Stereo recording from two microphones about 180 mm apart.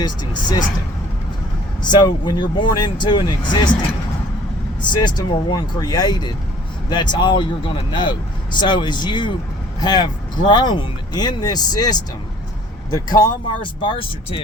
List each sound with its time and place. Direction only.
0.0 s speech: 25° left (ahead or behind)
1.8 s speech: 25° left (ahead or behind)
4.8 s speech: 25° left (ahead or behind)